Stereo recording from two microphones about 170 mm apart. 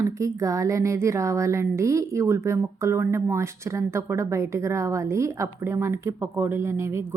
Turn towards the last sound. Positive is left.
turn(degrees=-15)  # may be behind; listen again after turning